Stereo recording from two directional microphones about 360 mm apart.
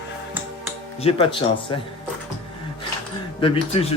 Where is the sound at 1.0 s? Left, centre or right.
Centre.